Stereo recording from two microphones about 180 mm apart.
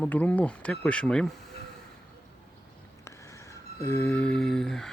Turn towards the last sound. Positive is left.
turn(degrees=5)  # may be behind; listen again after turning